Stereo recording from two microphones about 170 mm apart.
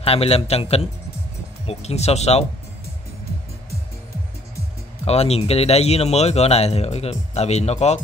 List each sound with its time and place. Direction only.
0.0 s speech: 35° left (ahead or behind)
5.0 s speech: 35° left (ahead or behind)